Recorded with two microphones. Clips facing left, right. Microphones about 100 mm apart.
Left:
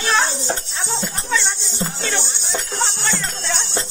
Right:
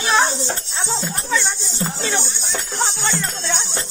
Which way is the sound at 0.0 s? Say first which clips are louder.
Right 2 dB; 15° right (ahead or behind).